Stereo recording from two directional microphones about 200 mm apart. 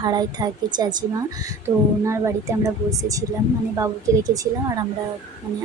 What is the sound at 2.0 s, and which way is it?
Speech, 15° right (ahead or behind).